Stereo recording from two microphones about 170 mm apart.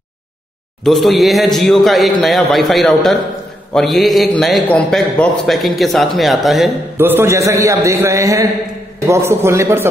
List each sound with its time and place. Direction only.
0.8 s a man's voice: centre (ahead or behind)
7.0 s a man's voice: 15° right (ahead or behind)